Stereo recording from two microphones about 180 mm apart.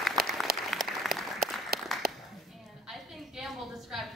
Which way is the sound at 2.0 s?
55° right (ahead or behind).